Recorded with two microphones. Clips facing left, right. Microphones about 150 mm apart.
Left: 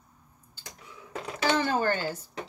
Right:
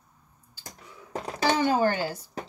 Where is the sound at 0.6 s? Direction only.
35° right (ahead or behind).